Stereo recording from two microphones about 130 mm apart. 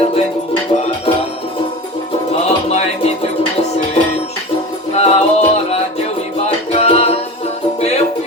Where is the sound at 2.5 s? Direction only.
55° left (ahead or behind).